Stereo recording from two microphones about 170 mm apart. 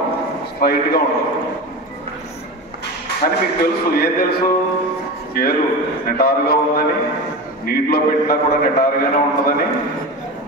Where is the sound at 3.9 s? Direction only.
60° left (ahead or behind).